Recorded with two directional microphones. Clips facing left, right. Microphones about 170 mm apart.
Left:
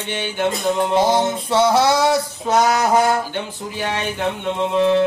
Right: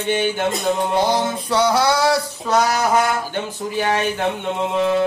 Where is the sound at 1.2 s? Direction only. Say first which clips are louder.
Left 2 dB; 25° left (ahead or behind).